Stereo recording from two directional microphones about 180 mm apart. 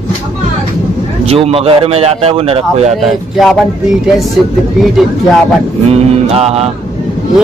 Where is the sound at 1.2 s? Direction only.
35° right (ahead or behind).